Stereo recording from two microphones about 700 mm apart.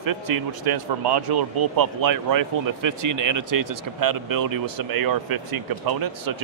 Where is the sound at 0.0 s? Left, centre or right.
Right.